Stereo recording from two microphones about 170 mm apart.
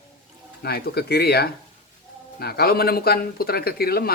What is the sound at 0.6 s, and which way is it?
Speech, 70° left (ahead or behind).